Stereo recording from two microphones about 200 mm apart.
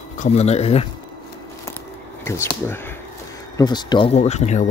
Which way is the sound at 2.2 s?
15° left (ahead or behind).